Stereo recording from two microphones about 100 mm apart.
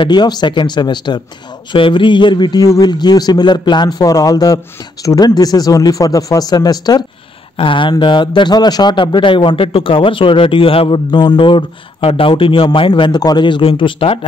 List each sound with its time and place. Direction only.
0.0 s a man's voice: 45° left (ahead or behind)
7.5 s a man's voice: 60° left (ahead or behind)
11.1 s a man's voice: 45° left (ahead or behind)